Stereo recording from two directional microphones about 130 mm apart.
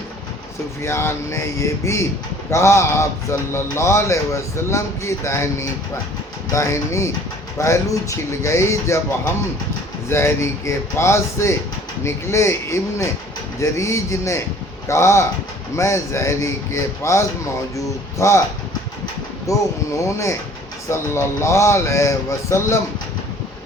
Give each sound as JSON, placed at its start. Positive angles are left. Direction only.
{"t": 0.8, "sound": "speech", "side_deg": 20}
{"t": 19.5, "sound": "speech", "side_deg": 25}